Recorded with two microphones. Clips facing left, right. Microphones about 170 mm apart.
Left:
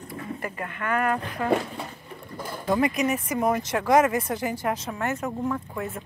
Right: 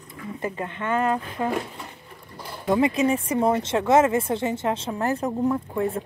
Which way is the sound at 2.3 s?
45° left (ahead or behind).